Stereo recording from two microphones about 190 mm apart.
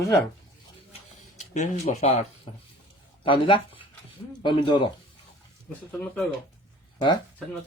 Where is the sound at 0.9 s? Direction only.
40° left (ahead or behind).